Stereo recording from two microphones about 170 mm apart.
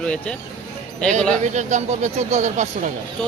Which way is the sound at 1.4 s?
45° right (ahead or behind).